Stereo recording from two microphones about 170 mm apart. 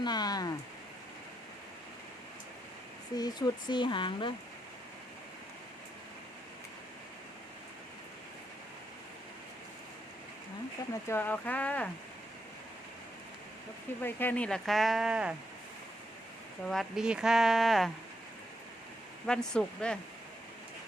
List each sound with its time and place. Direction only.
0.0 s speech: 25° left (ahead or behind)
3.2 s speech: 25° left (ahead or behind)
11.1 s speech: 10° left (ahead or behind)
14.0 s speech: 10° left (ahead or behind); by 15.4 s 5° right (ahead or behind)
16.6 s speech: centre (ahead or behind)
19.2 s speech: 5° left (ahead or behind)